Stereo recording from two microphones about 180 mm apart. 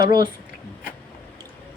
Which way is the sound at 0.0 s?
25° right (ahead or behind).